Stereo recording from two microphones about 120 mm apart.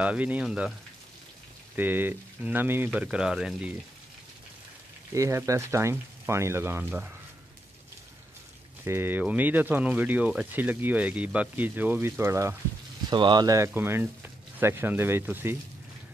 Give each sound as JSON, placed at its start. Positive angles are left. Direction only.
{"t": 0.0, "sound": "speech", "side_deg": -10}
{"t": 1.8, "sound": "speech", "side_deg": -15}
{"t": 5.1, "sound": "speech", "side_deg": -25}
{"t": 8.8, "sound": "speech", "side_deg": -20}
{"t": 13.1, "sound": "speech", "side_deg": -40}